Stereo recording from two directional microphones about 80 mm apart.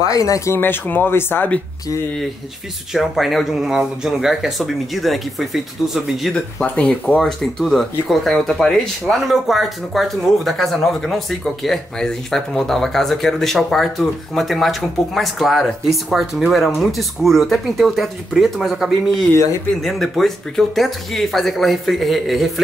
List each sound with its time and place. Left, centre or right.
0.0 s speech: left
0.6 s speech: left
2.9 s speech: centre
6.6 s speech: centre